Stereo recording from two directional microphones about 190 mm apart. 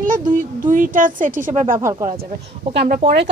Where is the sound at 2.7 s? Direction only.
50° right (ahead or behind).